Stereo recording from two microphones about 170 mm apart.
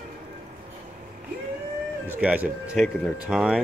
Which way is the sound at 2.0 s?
10° right (ahead or behind).